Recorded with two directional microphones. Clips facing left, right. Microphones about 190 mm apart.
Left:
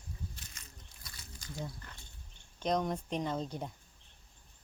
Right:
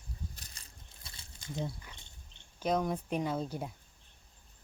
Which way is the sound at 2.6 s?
5° right (ahead or behind).